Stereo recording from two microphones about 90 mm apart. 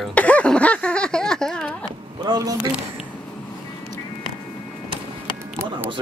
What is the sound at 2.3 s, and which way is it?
Speech, 45° right (ahead or behind).